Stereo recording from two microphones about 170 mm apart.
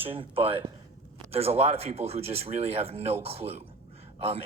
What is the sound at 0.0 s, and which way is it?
Speech, 30° right (ahead or behind).